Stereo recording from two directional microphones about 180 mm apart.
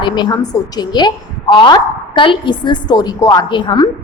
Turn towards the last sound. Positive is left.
turn(degrees=25)  # may be behind; listen again after turning